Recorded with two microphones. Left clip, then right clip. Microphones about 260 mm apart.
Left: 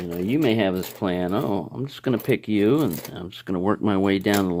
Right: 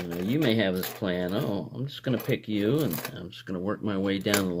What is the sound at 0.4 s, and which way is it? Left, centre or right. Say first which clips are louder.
Speech: left 3 dB; left.